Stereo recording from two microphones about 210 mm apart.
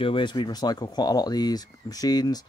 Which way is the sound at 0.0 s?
25° left (ahead or behind).